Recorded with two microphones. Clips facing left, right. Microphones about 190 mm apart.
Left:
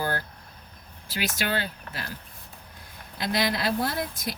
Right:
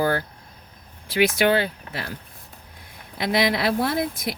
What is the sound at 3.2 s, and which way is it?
Speech, 70° right (ahead or behind).